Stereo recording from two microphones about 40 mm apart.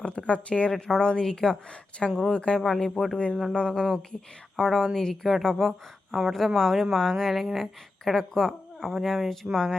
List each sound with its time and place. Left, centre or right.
0.0 s speech: left
0.7 s a woman's voice: centre
2.6 s a woman's voice: centre
3.5 s speech: left
4.5 s a woman's voice: centre